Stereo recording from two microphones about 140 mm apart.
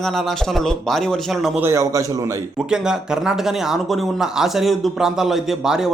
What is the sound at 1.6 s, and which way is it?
Speech, 20° right (ahead or behind).